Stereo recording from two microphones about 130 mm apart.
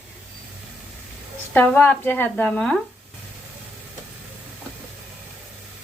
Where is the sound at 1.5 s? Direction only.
15° left (ahead or behind).